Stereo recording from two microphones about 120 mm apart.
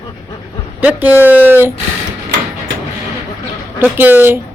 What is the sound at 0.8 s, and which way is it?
Speech, 15° right (ahead or behind).